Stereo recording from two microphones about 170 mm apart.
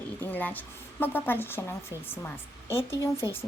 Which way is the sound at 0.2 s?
10° left (ahead or behind).